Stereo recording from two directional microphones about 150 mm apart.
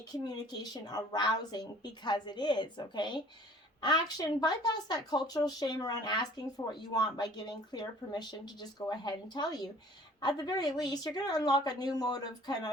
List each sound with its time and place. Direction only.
0.1 s speech: 25° left (ahead or behind)